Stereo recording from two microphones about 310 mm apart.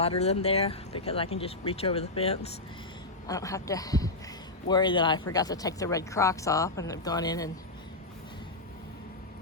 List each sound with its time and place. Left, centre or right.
0.0 s speech: centre